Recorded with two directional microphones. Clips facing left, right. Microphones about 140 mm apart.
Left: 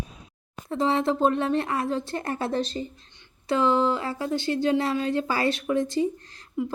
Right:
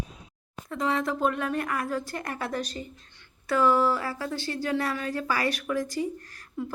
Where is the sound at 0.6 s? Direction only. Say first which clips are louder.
Left 4 dB; 30° left (ahead or behind).